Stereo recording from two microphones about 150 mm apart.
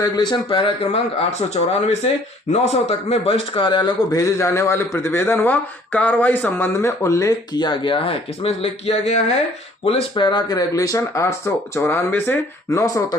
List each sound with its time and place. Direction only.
0.0 s a man's voice: 30° left (ahead or behind)